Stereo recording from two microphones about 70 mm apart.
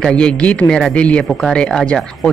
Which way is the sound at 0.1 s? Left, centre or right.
Centre.